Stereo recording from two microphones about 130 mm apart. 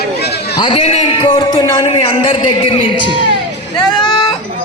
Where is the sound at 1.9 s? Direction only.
45° left (ahead or behind).